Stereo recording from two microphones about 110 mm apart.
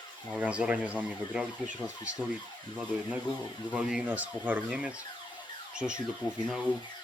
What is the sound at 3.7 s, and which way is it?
Speech, 10° right (ahead or behind).